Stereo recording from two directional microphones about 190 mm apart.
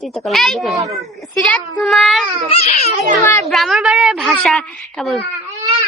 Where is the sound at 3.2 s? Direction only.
10° left (ahead or behind).